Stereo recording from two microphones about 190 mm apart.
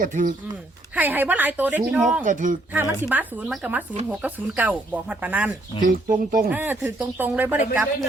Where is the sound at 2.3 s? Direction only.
45° right (ahead or behind).